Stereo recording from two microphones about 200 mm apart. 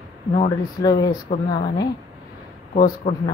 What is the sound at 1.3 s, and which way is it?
Speech, 40° left (ahead or behind).